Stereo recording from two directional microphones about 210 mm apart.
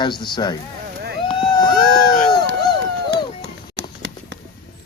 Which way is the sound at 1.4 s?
20° left (ahead or behind).